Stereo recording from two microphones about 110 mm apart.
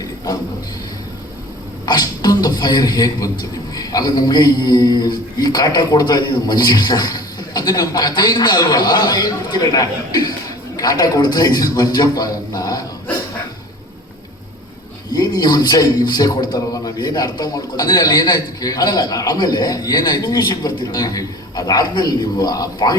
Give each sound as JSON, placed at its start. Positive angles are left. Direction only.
{"t": 1.9, "sound": "a man's voice", "side_deg": 40}
{"t": 15.1, "sound": "a man's voice", "side_deg": 40}